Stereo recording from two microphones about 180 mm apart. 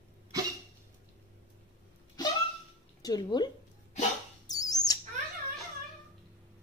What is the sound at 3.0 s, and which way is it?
Speech, 25° left (ahead or behind).